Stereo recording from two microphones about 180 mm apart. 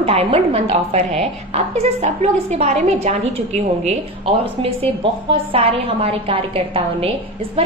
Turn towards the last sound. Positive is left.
turn(degrees=-30)  # may be behind; listen again after turning